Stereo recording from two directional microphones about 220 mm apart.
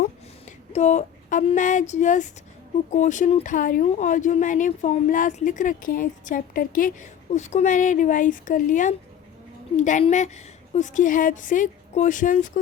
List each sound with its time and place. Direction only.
0.4 s speech: 30° left (ahead or behind)